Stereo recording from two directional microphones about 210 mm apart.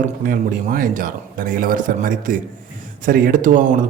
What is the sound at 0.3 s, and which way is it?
A man's voice, 40° right (ahead or behind).